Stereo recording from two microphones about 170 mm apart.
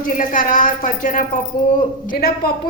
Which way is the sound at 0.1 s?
50° left (ahead or behind).